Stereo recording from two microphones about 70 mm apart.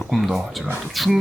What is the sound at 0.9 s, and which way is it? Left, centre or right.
Speech, centre.